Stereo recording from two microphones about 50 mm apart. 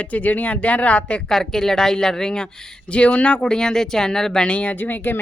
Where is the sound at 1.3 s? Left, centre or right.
Centre; by 3.4 s left.